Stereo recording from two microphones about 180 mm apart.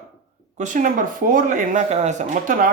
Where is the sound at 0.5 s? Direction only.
45° right (ahead or behind).